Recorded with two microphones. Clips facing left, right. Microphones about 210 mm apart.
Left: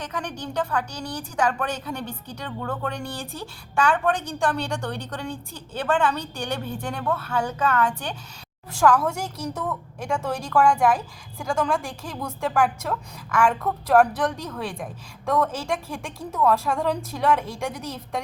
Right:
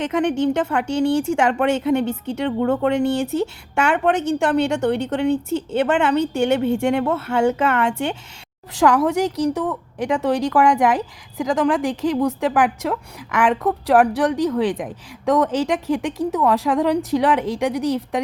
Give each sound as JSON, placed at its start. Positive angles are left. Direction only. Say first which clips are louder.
{"t": 0.0, "sound": "a woman's voice", "louder": "right 13 dB", "side_deg": -25}